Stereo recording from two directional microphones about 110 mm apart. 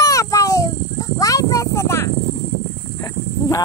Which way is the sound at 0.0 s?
30° left (ahead or behind).